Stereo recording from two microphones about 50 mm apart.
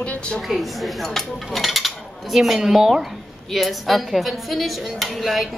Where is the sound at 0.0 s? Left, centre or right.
Left.